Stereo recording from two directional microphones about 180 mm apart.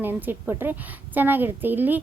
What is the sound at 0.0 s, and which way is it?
A woman's voice, 10° right (ahead or behind).